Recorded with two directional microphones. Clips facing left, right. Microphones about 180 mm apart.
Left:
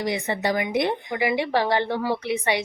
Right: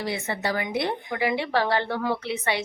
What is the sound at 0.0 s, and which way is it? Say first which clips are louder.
Speech: left 3 dB; 15° left (ahead or behind).